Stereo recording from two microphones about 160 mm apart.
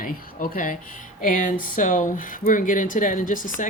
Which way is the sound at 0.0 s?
60° left (ahead or behind).